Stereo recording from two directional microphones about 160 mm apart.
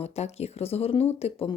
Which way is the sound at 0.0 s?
40° left (ahead or behind).